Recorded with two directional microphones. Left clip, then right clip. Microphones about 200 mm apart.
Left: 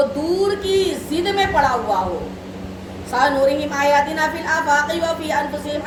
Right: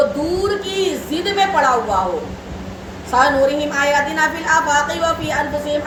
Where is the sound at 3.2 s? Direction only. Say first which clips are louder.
Right 2 dB; 5° right (ahead or behind).